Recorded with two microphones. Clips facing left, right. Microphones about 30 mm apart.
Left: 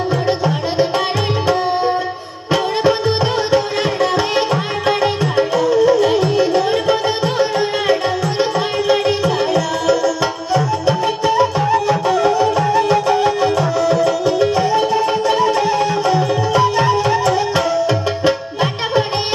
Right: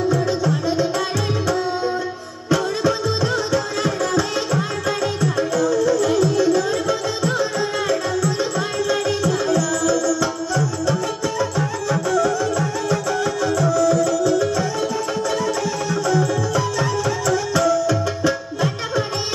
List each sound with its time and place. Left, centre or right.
0.1 s music: left
2.5 s music: left